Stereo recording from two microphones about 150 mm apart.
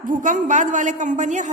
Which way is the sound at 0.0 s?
60° right (ahead or behind).